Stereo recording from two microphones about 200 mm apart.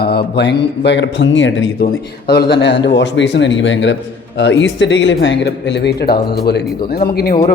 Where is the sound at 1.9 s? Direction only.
50° left (ahead or behind).